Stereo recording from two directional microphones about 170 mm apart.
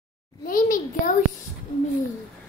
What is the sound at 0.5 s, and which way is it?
Speech, 50° left (ahead or behind).